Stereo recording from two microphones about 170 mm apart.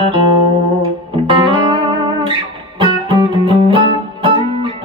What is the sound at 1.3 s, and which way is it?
Music, 30° right (ahead or behind).